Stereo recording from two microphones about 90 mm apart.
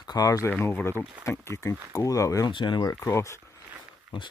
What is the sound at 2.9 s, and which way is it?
Speech, 30° left (ahead or behind).